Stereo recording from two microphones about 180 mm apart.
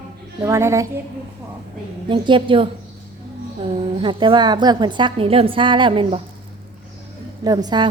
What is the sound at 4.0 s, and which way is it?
A woman's voice, 25° right (ahead or behind).